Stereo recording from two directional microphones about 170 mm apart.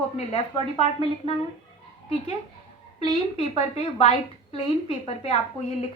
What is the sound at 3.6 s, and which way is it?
A woman's voice, 35° left (ahead or behind).